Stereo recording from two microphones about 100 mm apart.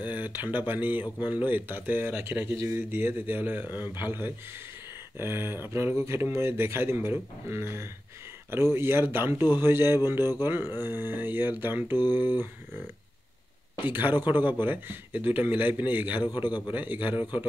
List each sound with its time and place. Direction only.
0.0 s speech: 20° right (ahead or behind)
13.8 s speech: 20° right (ahead or behind)
16.4 s speech: 50° left (ahead or behind)
16.7 s a man's voice: 20° right (ahead or behind)
17.1 s speech: 50° left (ahead or behind)